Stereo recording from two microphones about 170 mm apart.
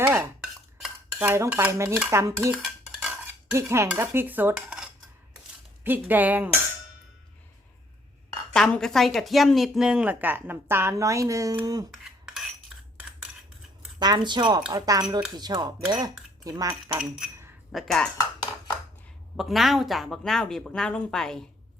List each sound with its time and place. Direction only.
0.0 s stir: 10° right (ahead or behind)
1.2 s speech: 10° right (ahead or behind)
2.6 s cutlery: centre (ahead or behind)
3.1 s cutlery: 15° right (ahead or behind)
5.8 s speech: 10° right (ahead or behind)
8.5 s speech: 5° left (ahead or behind); by 11.9 s 20° right (ahead or behind)
12.2 s cutlery: centre (ahead or behind)
14.0 s speech: 25° right (ahead or behind)
17.7 s speech: centre (ahead or behind)
19.4 s speech: centre (ahead or behind)